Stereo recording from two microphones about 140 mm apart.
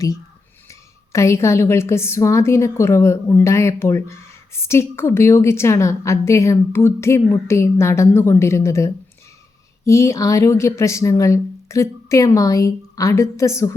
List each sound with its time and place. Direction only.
0.7 s a woman's voice: 20° left (ahead or behind)